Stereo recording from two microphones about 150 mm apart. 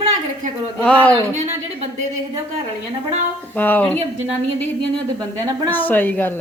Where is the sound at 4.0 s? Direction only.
40° right (ahead or behind).